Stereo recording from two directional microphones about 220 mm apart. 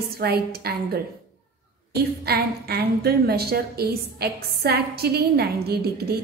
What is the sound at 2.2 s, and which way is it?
A woman's voice, 45° right (ahead or behind).